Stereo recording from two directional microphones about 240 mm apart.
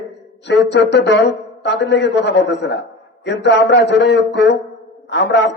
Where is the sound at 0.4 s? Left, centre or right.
Left.